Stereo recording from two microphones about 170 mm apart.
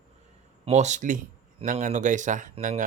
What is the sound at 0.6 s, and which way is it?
Speech, 40° right (ahead or behind).